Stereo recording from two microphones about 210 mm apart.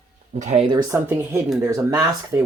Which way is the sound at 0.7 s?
15° right (ahead or behind).